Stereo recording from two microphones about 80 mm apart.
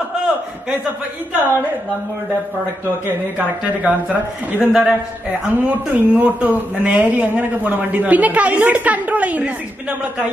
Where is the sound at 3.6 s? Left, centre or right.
Centre.